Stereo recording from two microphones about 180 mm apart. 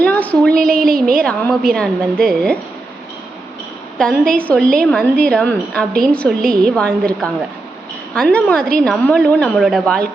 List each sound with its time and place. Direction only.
0.0 s a sound: 10° left (ahead or behind)
1.2 s a woman's voice: 5° left (ahead or behind)
3.9 s a woman's voice: 5° left (ahead or behind)